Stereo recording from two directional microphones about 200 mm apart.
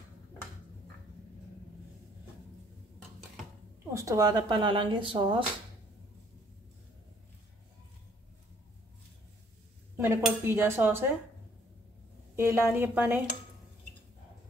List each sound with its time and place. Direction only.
3.9 s a woman's voice: 15° right (ahead or behind)
9.9 s cutlery: 10° right (ahead or behind)
12.4 s cutlery: 10° right (ahead or behind)